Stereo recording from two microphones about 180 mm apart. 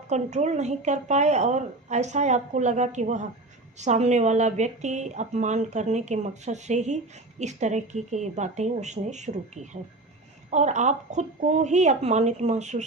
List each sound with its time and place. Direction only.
0.1 s speech: 40° right (ahead or behind)